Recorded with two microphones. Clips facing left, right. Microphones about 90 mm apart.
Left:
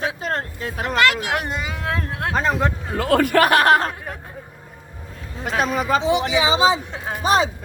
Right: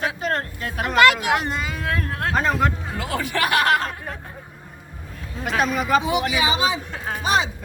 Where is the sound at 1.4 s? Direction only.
20° left (ahead or behind).